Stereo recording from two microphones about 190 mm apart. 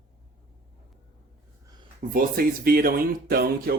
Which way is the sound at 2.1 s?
50° right (ahead or behind).